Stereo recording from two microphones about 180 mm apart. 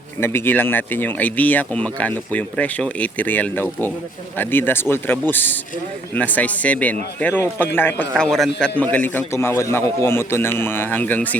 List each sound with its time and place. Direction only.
0.2 s speech: 10° left (ahead or behind)